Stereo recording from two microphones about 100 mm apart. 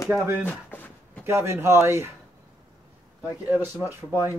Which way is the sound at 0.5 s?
20° left (ahead or behind).